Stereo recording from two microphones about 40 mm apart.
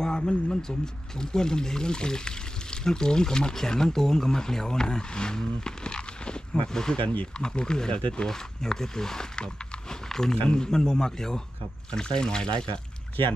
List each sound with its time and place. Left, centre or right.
0.0 s speech: left
10.0 s a sound: centre
10.5 s speech: centre